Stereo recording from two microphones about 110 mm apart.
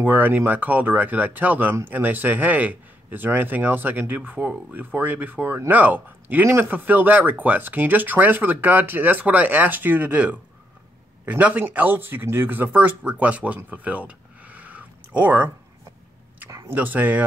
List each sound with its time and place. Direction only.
0.0 s a man's voice: 15° right (ahead or behind)
16.4 s a sound: 30° right (ahead or behind)
16.7 s a man's voice: 15° right (ahead or behind)